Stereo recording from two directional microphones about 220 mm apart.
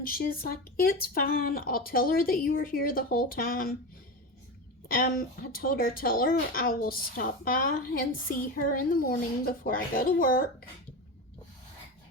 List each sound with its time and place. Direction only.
0.0 s a woman's voice: 40° left (ahead or behind)
4.9 s a woman's voice: 40° left (ahead or behind)